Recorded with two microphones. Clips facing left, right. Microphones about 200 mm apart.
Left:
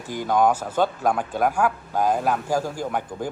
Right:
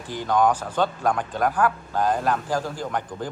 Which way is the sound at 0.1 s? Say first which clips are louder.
Left 1 dB; 10° left (ahead or behind).